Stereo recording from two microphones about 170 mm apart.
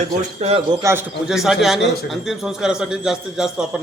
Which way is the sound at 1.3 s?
Centre (ahead or behind).